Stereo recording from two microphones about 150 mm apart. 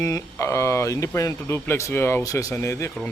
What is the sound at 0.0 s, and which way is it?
Speech, 20° left (ahead or behind).